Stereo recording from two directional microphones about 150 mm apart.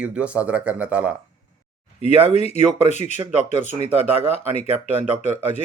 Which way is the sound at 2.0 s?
45° left (ahead or behind).